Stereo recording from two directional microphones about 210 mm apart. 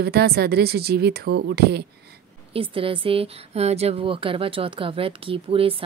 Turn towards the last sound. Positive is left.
turn(degrees=-25)  # may be behind; listen again after turning